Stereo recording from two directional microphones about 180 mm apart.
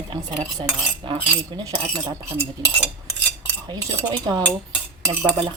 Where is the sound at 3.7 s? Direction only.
20° right (ahead or behind).